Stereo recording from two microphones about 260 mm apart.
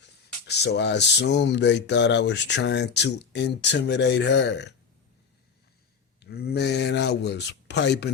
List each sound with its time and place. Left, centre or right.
0.4 s speech: left
6.2 s speech: left